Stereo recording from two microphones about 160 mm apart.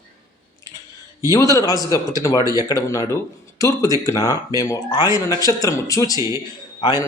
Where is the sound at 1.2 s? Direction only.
20° left (ahead or behind).